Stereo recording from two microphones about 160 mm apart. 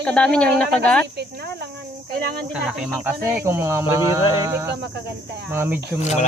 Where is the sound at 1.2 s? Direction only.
90° right.